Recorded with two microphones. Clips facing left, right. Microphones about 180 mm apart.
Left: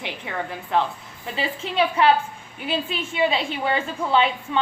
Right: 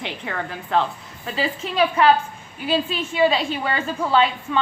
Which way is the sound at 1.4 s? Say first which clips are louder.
Right 2 dB; 25° left (ahead or behind).